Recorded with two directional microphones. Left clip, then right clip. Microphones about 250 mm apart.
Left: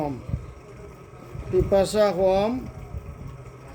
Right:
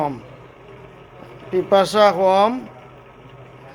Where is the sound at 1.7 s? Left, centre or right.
Centre.